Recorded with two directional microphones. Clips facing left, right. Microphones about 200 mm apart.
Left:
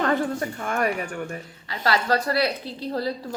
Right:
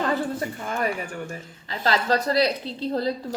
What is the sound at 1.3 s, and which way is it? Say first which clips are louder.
Speech: left 1 dB; 25° right (ahead or behind).